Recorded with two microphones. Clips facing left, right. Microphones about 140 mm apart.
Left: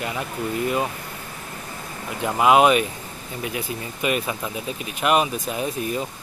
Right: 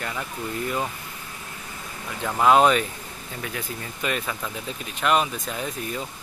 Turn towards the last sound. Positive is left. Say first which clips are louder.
# left 5 dB
turn(degrees=15)  # may be behind; listen again after turning